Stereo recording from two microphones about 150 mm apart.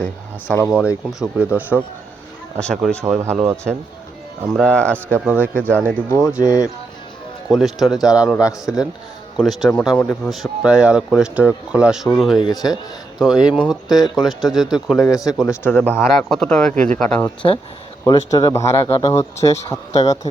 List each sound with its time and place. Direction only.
0.0 s speech: 10° left (ahead or behind)
0.7 s speech: 5° right (ahead or behind)
2.6 s speech: 5° left (ahead or behind)
3.2 s speech: 15° right (ahead or behind)
4.5 s speech: 5° left (ahead or behind)
5.1 s speech: 10° right (ahead or behind)
5.4 s speech: 10° left (ahead or behind)
7.4 s speech: centre (ahead or behind)
12.4 s speech: 25° left (ahead or behind)
13.1 s speech: 5° right (ahead or behind)
13.8 s speech: 25° left (ahead or behind)
14.3 s speech: centre (ahead or behind)
14.9 s speech: 20° left (ahead or behind); by 17.2 s 5° left (ahead or behind)
17.4 s speech: 30° left (ahead or behind)